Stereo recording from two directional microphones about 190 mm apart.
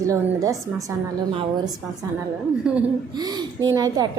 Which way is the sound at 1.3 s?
30° right (ahead or behind).